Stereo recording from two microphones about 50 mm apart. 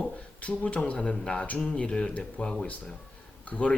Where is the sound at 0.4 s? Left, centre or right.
Left.